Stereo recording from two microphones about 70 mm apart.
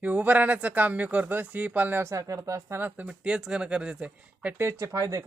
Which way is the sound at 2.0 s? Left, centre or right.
Right.